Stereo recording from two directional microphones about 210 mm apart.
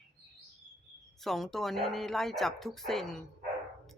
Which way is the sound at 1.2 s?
Centre (ahead or behind).